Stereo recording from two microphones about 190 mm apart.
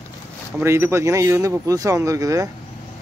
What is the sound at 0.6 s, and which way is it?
A man's voice, 15° right (ahead or behind).